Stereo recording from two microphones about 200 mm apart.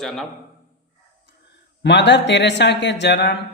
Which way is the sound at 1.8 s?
60° left (ahead or behind).